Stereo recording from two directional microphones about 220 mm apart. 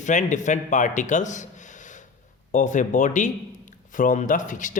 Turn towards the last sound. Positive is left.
turn(degrees=35)  # may be behind; listen again after turning